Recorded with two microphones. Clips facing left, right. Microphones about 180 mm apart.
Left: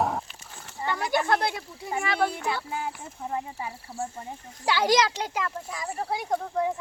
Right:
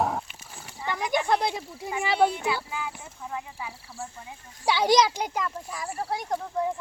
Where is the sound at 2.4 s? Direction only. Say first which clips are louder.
Even; 45° left (ahead or behind).